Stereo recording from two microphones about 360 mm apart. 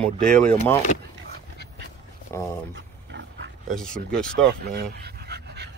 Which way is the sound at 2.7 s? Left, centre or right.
Right.